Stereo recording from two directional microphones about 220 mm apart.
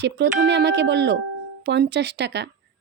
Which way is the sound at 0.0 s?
50° right (ahead or behind).